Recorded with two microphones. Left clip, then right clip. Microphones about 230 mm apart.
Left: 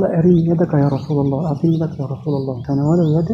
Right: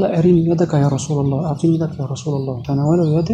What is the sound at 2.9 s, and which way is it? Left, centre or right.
Speech, right.